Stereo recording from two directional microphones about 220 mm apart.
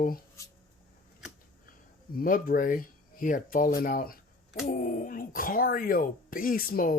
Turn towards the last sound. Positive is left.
turn(degrees=40)  # may be behind; listen again after turning